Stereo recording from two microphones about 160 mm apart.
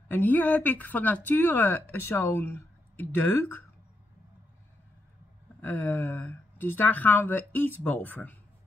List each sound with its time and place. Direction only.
0.1 s speech: 10° left (ahead or behind)
5.6 s speech: 10° left (ahead or behind)